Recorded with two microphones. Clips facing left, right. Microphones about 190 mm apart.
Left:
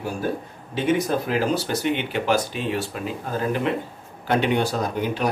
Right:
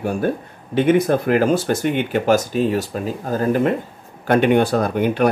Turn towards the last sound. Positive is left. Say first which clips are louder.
# right 7 dB
turn(degrees=-60)  # may be behind; listen again after turning